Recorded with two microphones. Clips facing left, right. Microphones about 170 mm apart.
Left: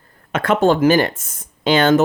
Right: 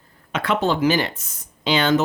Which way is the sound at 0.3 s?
50° left (ahead or behind).